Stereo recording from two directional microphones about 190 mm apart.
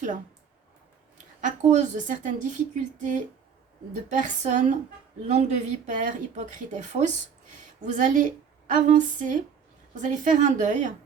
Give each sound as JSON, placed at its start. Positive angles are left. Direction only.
{"t": 1.4, "sound": "a woman's voice", "side_deg": -40}